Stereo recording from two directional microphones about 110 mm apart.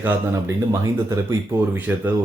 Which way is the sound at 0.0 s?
20° right (ahead or behind).